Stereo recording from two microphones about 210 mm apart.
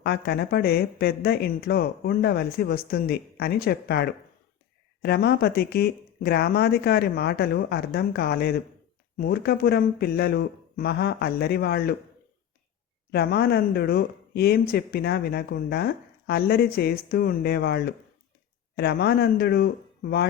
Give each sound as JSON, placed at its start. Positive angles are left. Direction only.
{"t": 0.0, "sound": "speech", "side_deg": 50}
{"t": 13.1, "sound": "speech", "side_deg": 50}